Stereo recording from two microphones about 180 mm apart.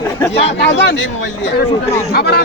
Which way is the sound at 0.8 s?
85° left.